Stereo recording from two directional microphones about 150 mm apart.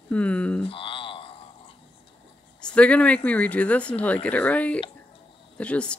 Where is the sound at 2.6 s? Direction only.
5° left (ahead or behind).